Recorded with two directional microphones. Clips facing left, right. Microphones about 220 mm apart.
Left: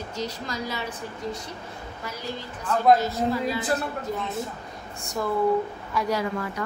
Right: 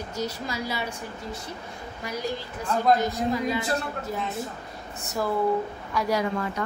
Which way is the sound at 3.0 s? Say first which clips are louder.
Even; 15° right (ahead or behind).